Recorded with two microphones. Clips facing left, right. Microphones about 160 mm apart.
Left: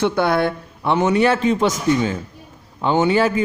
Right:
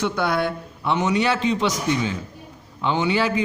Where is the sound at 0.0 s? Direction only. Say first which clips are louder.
Left 5 dB; 55° left (ahead or behind).